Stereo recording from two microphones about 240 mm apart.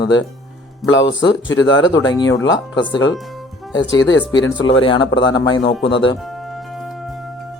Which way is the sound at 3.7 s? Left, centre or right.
Left.